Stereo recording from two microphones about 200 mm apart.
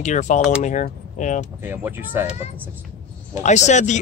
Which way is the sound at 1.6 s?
10° right (ahead or behind).